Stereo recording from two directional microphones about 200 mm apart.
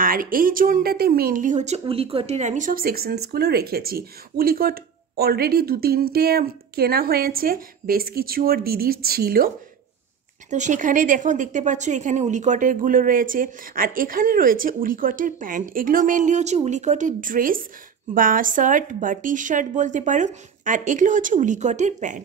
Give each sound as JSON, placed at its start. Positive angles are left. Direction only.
{"t": 0.0, "sound": "a woman's voice", "side_deg": -45}
{"t": 10.5, "sound": "a woman's voice", "side_deg": -40}